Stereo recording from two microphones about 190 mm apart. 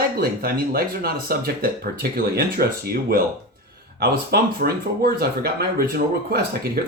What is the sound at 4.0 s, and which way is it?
Speech, 55° right (ahead or behind).